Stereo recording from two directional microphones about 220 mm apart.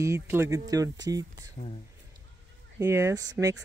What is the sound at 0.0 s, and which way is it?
Speech, 10° right (ahead or behind).